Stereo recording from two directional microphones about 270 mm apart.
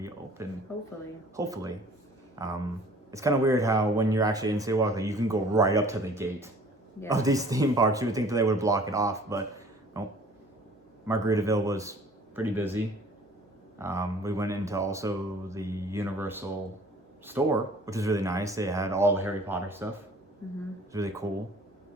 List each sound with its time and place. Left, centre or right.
0.4 s speech: centre
11.0 s speech: centre
20.9 s speech: centre